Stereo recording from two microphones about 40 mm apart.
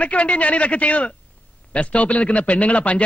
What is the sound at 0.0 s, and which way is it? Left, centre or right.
A man's voice, left.